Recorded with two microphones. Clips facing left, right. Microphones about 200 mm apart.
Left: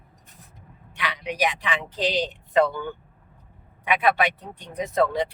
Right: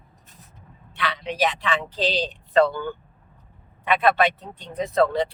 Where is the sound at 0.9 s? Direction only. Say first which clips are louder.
Right 2 dB; 15° left (ahead or behind).